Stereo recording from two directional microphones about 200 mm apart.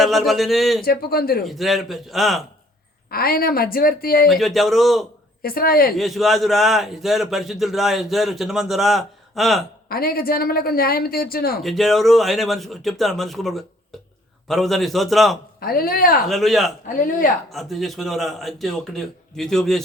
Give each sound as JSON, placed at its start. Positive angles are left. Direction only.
{"t": 0.0, "sound": "a man's voice", "side_deg": 0}
{"t": 0.9, "sound": "speech", "side_deg": 50}
{"t": 1.5, "sound": "a man's voice", "side_deg": 0}
{"t": 3.1, "sound": "speech", "side_deg": 50}
{"t": 4.3, "sound": "a man's voice", "side_deg": 0}
{"t": 5.4, "sound": "speech", "side_deg": 50}
{"t": 6.0, "sound": "a man's voice", "side_deg": 0}
{"t": 9.9, "sound": "speech", "side_deg": 50}
{"t": 11.6, "sound": "a man's voice", "side_deg": 0}
{"t": 15.6, "sound": "speech", "side_deg": 50}
{"t": 16.3, "sound": "a man's voice", "side_deg": 0}
{"t": 16.8, "sound": "speech", "side_deg": 45}
{"t": 17.5, "sound": "a man's voice", "side_deg": 0}